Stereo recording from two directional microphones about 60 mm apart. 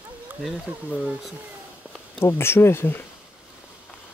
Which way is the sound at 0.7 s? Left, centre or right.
Right.